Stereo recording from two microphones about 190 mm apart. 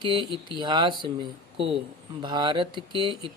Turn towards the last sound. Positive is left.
turn(degrees=-25)  # may be behind; listen again after turning